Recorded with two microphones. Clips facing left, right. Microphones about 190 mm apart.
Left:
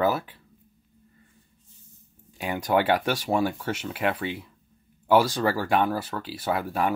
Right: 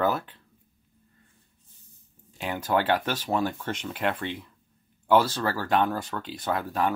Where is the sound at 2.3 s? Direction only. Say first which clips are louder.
Left 2 dB; 10° left (ahead or behind).